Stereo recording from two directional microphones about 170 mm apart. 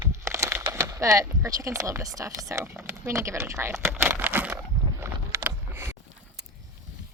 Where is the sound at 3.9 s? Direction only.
10° right (ahead or behind).